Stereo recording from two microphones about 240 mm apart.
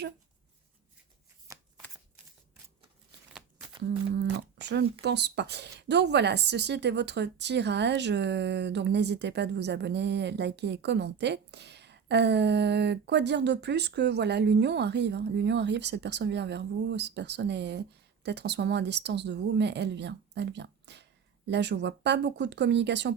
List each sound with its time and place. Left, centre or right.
1.5 s shuffling cards: centre
3.8 s humming: right
4.6 s speech: right